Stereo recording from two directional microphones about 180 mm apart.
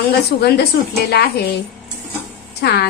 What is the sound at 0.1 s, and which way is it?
Speech, 65° left (ahead or behind).